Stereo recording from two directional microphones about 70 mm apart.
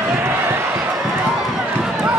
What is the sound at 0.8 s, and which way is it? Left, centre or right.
Run, centre.